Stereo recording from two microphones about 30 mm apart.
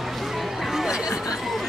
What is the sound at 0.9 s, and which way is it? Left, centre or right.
Chatter, right.